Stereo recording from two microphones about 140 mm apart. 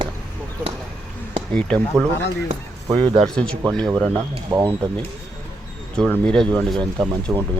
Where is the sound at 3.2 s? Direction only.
5° left (ahead or behind).